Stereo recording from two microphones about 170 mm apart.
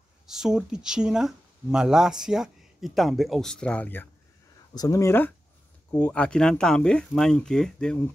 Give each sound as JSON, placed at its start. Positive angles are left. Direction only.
{"t": 0.3, "sound": "speech", "side_deg": -5}